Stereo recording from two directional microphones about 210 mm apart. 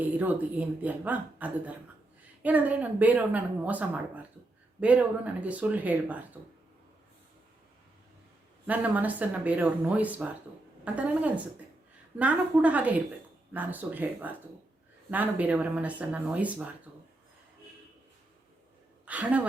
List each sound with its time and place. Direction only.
0.0 s a woman's voice: 5° right (ahead or behind)
8.6 s a woman's voice: 5° right (ahead or behind)
19.0 s a woman's voice: 5° right (ahead or behind)